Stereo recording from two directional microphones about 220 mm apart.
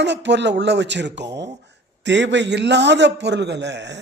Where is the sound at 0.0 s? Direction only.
50° right (ahead or behind).